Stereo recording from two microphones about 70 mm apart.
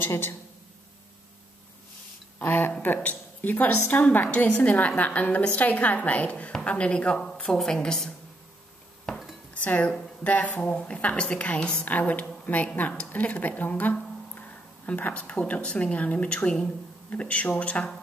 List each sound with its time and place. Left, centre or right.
0.0 s speech: left
2.3 s a sound: left
2.8 s a woman's voice: left; by 8.1 s centre
9.5 s a woman's voice: centre